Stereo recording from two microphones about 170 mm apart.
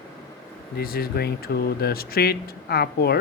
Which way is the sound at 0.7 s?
60° left (ahead or behind).